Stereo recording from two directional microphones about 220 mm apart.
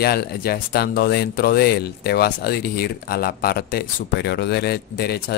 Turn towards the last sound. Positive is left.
turn(degrees=45)  # may be behind; listen again after turning